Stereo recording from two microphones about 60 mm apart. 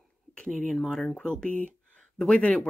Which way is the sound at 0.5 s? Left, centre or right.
Centre.